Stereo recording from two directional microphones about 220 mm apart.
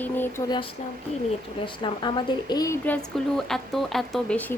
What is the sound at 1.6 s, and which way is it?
A woman's voice, 20° left (ahead or behind).